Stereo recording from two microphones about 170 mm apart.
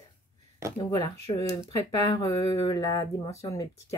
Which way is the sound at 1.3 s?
30° left (ahead or behind).